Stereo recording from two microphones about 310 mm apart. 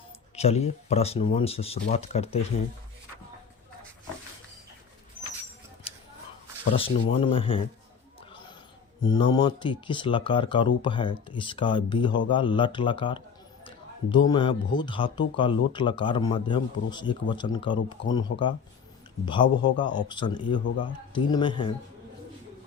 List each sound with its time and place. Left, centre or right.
0.3 s speech: centre
6.7 s speech: centre
9.0 s speech: centre
14.3 s speech: centre